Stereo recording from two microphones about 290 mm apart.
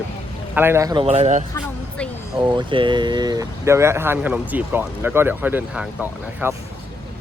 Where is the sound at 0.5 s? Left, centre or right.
Centre.